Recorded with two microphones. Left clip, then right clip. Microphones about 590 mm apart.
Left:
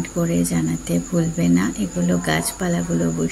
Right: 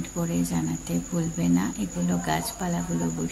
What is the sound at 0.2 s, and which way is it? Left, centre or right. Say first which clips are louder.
Speech: left 7 dB; right.